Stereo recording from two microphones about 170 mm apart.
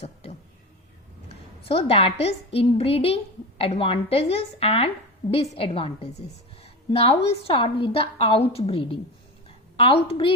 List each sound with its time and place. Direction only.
1.3 s a woman's voice: 35° left (ahead or behind)
5.2 s a woman's voice: 25° left (ahead or behind)
6.6 s a sound: 35° left (ahead or behind)
7.3 s a woman's voice: 35° left (ahead or behind)